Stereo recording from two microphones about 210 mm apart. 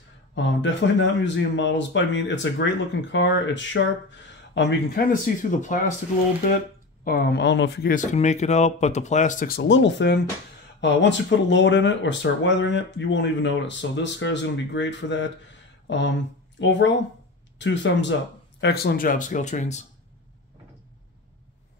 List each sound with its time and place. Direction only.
0.3 s speech: 60° left (ahead or behind)
5.1 s speech: 40° left (ahead or behind)
7.1 s speech: 45° left (ahead or behind)
7.9 s speech: 35° left (ahead or behind)
9.6 s speech: 60° left (ahead or behind)
16.5 s speech: 60° left (ahead or behind); by 19.8 s 35° left (ahead or behind)